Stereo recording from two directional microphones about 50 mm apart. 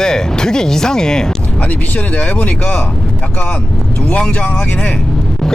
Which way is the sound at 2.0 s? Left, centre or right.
Left.